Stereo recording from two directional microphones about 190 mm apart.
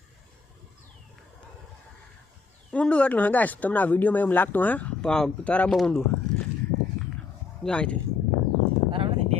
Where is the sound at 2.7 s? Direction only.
5° left (ahead or behind).